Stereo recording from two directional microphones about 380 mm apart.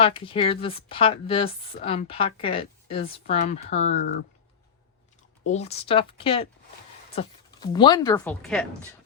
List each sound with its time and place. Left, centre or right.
0.0 s a woman's voice: centre
5.5 s a woman's voice: centre